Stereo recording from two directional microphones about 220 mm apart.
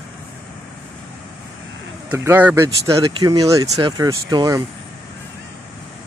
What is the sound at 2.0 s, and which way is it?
Speech, 10° right (ahead or behind).